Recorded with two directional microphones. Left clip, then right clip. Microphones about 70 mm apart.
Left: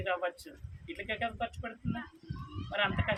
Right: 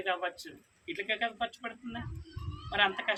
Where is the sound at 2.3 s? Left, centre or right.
Left.